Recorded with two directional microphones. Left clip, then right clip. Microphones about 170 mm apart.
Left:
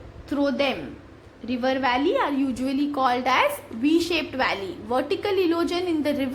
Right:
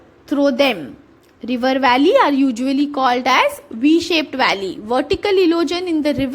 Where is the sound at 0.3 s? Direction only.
45° right (ahead or behind).